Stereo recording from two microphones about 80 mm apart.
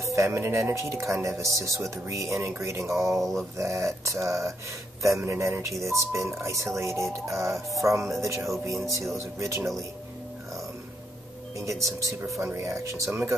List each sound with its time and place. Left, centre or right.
0.0 s speech: right
3.0 s speech: centre
3.5 s speech: right
11.5 s speech: right
13.1 s speech: right